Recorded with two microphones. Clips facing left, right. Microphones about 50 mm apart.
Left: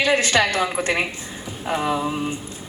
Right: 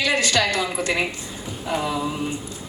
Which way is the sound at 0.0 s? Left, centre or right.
Left.